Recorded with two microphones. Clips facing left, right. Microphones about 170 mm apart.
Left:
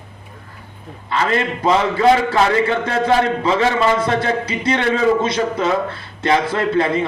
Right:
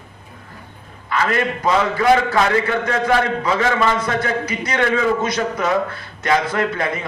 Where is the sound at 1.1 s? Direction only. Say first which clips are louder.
Left 1 dB; 25° left (ahead or behind).